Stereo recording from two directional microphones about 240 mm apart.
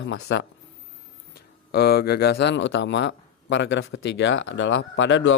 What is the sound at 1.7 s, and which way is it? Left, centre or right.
Speech, left.